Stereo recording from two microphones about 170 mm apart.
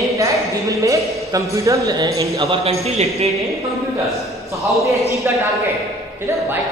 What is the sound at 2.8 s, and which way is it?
Speech, 40° right (ahead or behind).